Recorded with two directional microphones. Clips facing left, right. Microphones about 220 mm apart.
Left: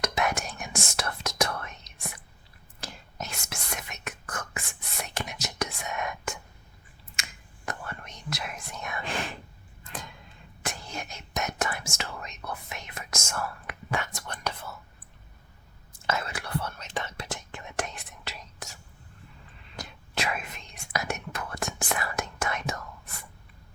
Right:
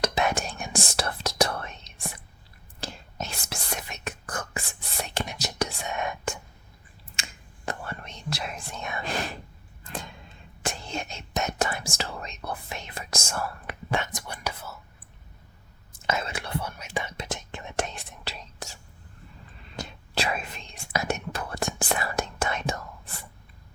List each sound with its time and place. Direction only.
0.0 s whispering: 30° right (ahead or behind)
9.0 s a sound: 40° right (ahead or behind)
10.6 s whispering: 25° right (ahead or behind); by 14.8 s 5° right (ahead or behind)
15.9 s whispering: 20° right (ahead or behind)
16.6 s whispering: 10° right (ahead or behind); by 23.2 s 30° right (ahead or behind)